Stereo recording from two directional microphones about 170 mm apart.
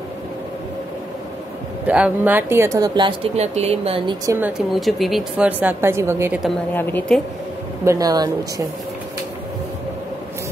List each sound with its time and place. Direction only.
1.9 s speech: 10° right (ahead or behind); by 4.2 s 30° right (ahead or behind)
4.3 s a woman's voice: 10° right (ahead or behind)
6.7 s a woman's voice: 10° left (ahead or behind)
7.8 s speech: 20° right (ahead or behind)